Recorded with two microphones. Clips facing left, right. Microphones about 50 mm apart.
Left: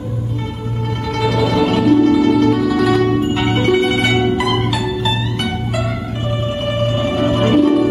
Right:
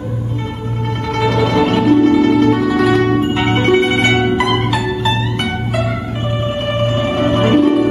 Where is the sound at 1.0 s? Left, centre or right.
Centre.